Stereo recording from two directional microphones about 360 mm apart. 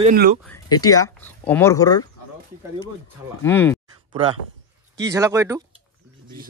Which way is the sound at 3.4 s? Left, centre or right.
Centre.